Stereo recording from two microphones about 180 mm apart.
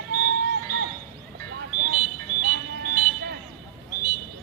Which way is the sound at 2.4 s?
55° right (ahead or behind).